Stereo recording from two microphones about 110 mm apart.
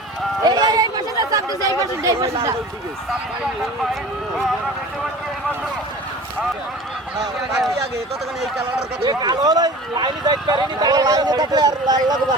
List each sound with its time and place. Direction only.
0.4 s speech: 40° right (ahead or behind)
7.2 s speech: centre (ahead or behind)
9.0 s speech: 40° right (ahead or behind)